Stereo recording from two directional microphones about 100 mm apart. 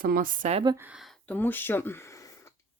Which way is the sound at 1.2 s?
15° left (ahead or behind).